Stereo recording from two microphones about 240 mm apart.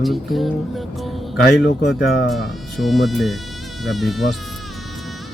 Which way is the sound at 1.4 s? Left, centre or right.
Left.